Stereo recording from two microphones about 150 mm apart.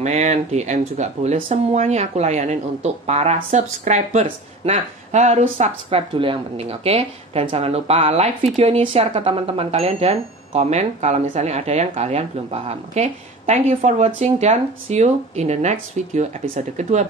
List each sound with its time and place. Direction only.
0.0 s speech: 50° right (ahead or behind)